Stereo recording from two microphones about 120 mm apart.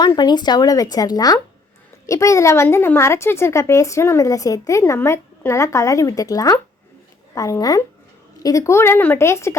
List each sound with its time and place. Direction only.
0.0 s a woman's voice: 35° left (ahead or behind)